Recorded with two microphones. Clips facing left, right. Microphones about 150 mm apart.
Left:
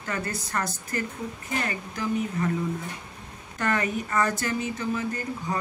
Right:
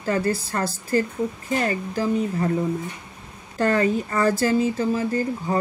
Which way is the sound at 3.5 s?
30° right (ahead or behind).